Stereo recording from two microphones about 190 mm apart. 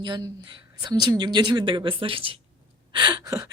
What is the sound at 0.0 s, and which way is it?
A woman's voice, 25° right (ahead or behind).